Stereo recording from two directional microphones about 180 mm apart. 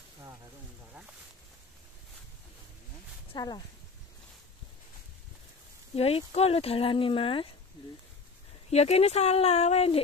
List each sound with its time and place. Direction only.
3.3 s speech: 25° left (ahead or behind)
5.9 s speech: 35° left (ahead or behind)
8.6 s speech: 35° left (ahead or behind)